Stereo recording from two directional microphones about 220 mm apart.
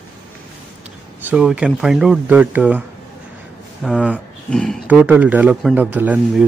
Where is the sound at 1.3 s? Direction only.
5° right (ahead or behind).